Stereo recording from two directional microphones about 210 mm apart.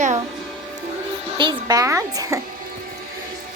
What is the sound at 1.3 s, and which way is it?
A child's voice, 20° right (ahead or behind).